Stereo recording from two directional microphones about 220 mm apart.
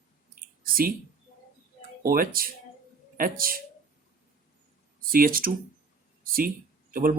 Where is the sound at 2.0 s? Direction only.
40° right (ahead or behind).